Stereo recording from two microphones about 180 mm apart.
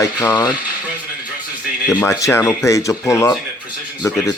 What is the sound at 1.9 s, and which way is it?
Speech, 15° left (ahead or behind).